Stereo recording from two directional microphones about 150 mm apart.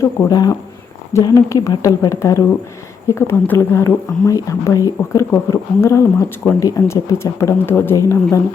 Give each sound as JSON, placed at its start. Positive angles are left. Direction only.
{"t": 0.0, "sound": "speech", "side_deg": 20}